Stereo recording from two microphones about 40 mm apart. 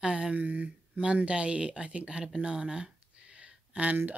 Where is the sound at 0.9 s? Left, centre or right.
Right.